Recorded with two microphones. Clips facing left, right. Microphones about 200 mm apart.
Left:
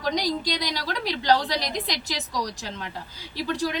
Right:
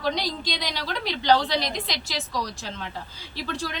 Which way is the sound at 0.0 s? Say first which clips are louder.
Left 2 dB; 15° left (ahead or behind).